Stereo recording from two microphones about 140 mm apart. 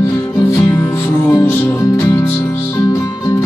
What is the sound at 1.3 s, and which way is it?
Music, 20° left (ahead or behind).